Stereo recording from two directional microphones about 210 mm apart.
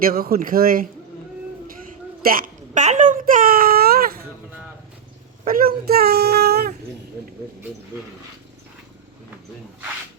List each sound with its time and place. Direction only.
0.0 s a woman's voice: 45° right (ahead or behind)
5.5 s speech: 45° right (ahead or behind)